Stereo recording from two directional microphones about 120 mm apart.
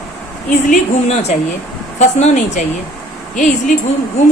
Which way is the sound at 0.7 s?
65° left (ahead or behind).